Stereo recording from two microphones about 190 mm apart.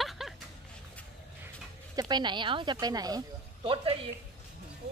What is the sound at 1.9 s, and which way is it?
Speech, 20° right (ahead or behind).